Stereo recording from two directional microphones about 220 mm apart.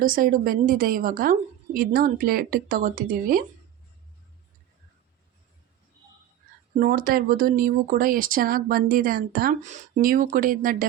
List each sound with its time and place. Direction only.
0.0 s speech: 40° right (ahead or behind)
6.7 s speech: 40° right (ahead or behind)